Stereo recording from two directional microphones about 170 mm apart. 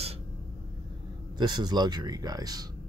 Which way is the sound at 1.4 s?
25° right (ahead or behind).